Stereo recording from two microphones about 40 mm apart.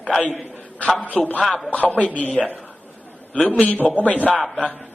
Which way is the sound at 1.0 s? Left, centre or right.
Left.